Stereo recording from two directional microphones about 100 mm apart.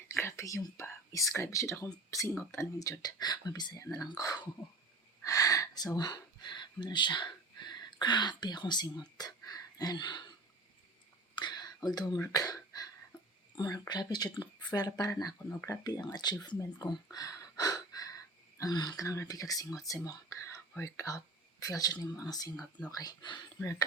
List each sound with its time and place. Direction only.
0.1 s speech: 30° left (ahead or behind)
3.0 s speech: 45° left (ahead or behind)
5.2 s a sound: 35° left (ahead or behind)
6.0 s speech: 45° left (ahead or behind)
11.3 s whispering: 45° left (ahead or behind)
12.3 s speech: 40° left (ahead or behind)